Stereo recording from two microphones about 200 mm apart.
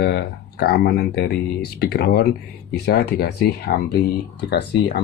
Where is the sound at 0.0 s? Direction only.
55° left (ahead or behind).